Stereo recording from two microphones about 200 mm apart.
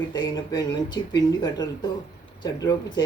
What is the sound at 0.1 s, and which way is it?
Speech, 20° left (ahead or behind).